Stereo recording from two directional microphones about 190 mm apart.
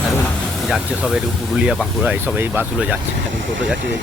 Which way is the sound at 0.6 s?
5° right (ahead or behind).